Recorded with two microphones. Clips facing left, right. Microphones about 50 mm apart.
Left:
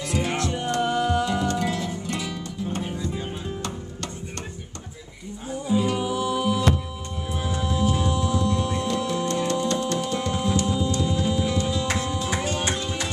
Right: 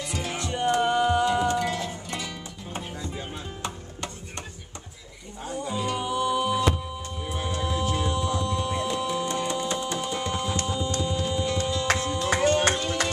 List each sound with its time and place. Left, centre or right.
0.0 s music: centre
5.7 s music: centre
12.8 s music: right